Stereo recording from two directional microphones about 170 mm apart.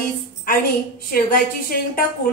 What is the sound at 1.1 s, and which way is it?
Speech, 60° left (ahead or behind).